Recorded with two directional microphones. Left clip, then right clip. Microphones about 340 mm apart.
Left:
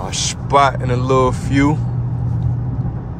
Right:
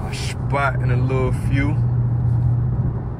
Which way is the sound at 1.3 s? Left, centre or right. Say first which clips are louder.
Left 8 dB; left.